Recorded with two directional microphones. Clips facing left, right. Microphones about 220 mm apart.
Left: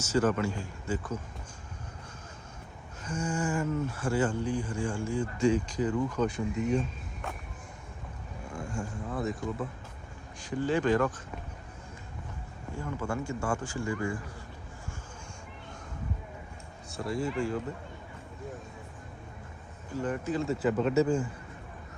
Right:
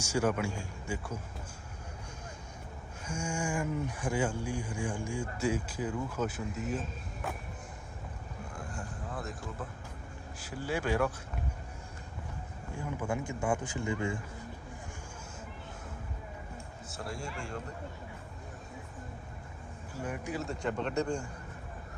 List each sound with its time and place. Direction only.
0.0 s speech: 10° right (ahead or behind)
3.0 s speech: 10° right (ahead or behind)
8.5 s a sound: centre (ahead or behind)
10.4 s speech: 5° right (ahead or behind)
12.7 s speech: 15° right (ahead or behind)
16.9 s a man's voice: centre (ahead or behind)
19.9 s speech: 10° right (ahead or behind)
20.5 s a man's voice: 5° left (ahead or behind)